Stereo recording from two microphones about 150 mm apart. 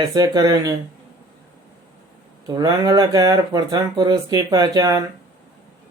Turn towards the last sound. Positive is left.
turn(degrees=-25)  # may be behind; listen again after turning